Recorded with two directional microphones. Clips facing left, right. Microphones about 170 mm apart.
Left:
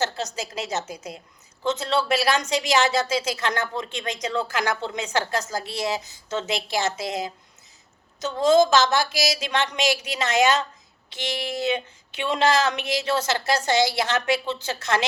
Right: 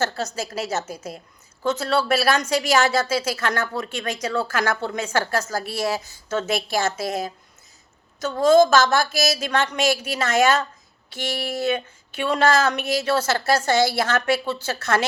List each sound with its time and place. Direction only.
0.0 s speech: 20° left (ahead or behind)
9.0 s speech: 45° right (ahead or behind)
9.4 s speech: 15° left (ahead or behind)
9.8 s speech: 45° right (ahead or behind)
10.2 s speech: 20° left (ahead or behind)